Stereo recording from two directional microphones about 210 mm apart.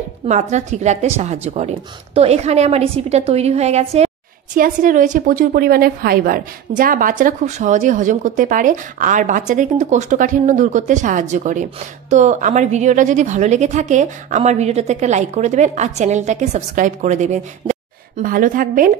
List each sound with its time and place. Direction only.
0.3 s a woman's voice: 35° right (ahead or behind)